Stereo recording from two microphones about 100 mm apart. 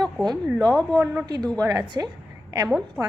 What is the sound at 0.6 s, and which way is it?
Speech, 15° left (ahead or behind).